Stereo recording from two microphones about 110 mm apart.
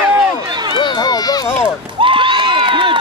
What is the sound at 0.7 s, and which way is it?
Run, 40° left (ahead or behind).